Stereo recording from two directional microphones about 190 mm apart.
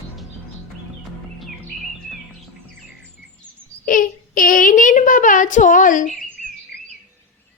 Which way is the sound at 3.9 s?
45° left (ahead or behind).